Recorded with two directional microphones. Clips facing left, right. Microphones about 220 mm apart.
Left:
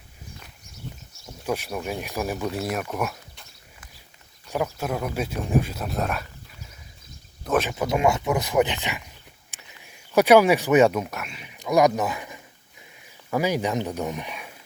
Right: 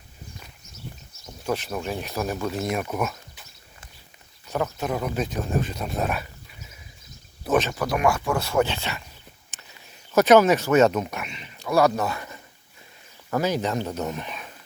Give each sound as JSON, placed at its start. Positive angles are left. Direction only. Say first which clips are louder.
{"t": 1.5, "sound": "speech", "louder": "even", "side_deg": 10}
{"t": 4.4, "sound": "speech", "louder": "even", "side_deg": 10}
{"t": 7.6, "sound": "speech", "louder": "left 1 dB", "side_deg": 20}